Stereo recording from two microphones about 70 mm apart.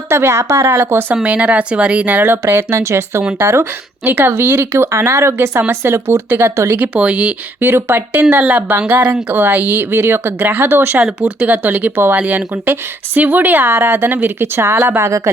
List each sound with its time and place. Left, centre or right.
0.1 s speech: right
1.1 s speech: centre; by 6.7 s right
6.7 s speech: right
7.7 s speech: right